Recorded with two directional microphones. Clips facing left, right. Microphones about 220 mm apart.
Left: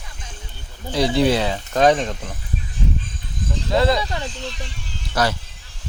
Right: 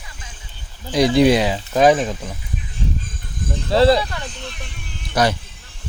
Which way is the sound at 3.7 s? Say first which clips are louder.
Right 5 dB; 35° right (ahead or behind).